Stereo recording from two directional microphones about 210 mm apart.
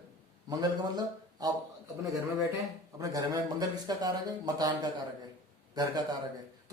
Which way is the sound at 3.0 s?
15° right (ahead or behind).